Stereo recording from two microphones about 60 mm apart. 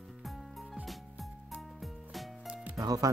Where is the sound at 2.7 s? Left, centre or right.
Right.